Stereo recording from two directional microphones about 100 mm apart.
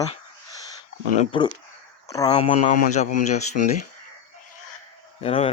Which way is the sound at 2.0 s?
40° left (ahead or behind).